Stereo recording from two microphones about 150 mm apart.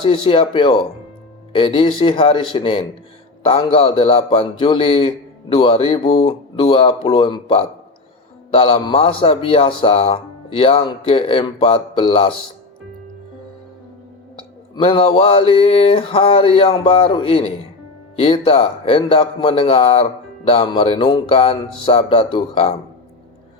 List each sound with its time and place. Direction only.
0.0 s speech: 35° left (ahead or behind)
14.8 s speech: 35° left (ahead or behind)